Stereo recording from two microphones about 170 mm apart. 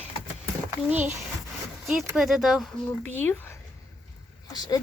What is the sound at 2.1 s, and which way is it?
Speech, centre (ahead or behind).